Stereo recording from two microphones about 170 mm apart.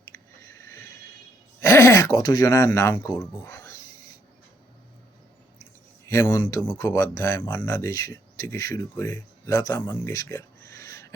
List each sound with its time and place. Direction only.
0.6 s a sound: 15° left (ahead or behind)
1.6 s speech: 20° left (ahead or behind)
6.1 s speech: 20° left (ahead or behind)